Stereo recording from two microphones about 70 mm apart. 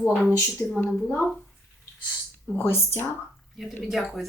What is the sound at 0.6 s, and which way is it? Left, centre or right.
Speech, centre.